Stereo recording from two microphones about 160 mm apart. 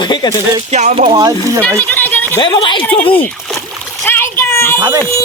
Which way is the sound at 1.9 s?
10° left (ahead or behind).